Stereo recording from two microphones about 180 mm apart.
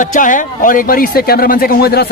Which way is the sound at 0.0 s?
45° left (ahead or behind).